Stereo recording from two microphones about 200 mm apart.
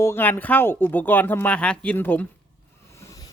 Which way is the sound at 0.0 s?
10° left (ahead or behind).